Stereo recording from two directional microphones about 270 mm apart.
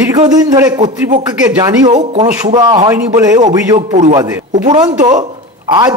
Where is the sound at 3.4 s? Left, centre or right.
Right.